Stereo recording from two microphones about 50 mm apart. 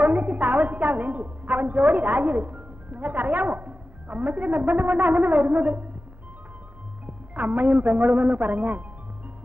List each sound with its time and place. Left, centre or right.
0.0 s a woman's voice: right
7.1 s speech: right